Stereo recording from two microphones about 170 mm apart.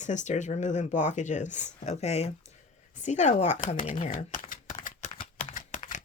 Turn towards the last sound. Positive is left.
turn(degrees=50)  # may be behind; listen again after turning